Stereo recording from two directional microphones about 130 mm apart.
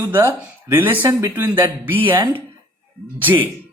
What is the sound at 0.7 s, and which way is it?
Speech, 15° right (ahead or behind).